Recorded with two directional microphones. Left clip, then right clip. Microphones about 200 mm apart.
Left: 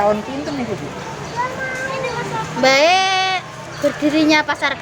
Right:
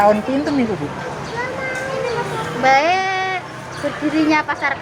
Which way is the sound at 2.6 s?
45° left (ahead or behind).